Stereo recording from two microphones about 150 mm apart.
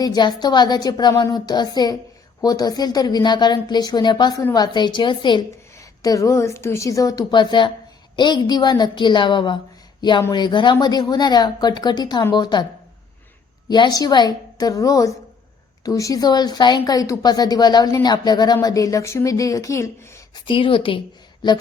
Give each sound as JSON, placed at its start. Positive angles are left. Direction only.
{"t": 0.0, "sound": "a woman's voice", "side_deg": 30}
{"t": 13.7, "sound": "speech", "side_deg": 30}
{"t": 20.5, "sound": "a woman's voice", "side_deg": 35}